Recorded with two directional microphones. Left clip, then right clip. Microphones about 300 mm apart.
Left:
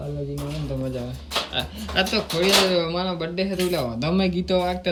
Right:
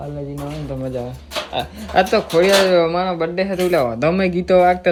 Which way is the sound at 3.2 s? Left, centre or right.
Centre.